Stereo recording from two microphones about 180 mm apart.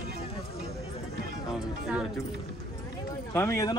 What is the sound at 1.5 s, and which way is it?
Speech, 5° right (ahead or behind).